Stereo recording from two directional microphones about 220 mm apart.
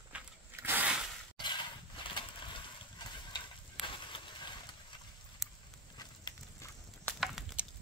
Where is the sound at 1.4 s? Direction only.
20° left (ahead or behind).